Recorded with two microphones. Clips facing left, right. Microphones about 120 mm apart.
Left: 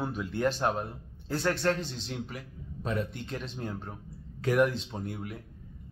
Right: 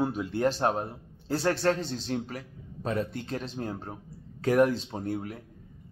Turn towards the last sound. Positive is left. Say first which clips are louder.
# right 4 dB
turn(degrees=-40)  # may be behind; listen again after turning